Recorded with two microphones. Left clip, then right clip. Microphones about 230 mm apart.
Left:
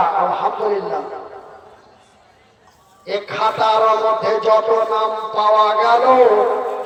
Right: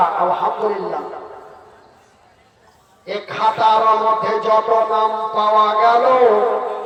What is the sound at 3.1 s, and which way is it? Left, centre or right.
A man's voice, left.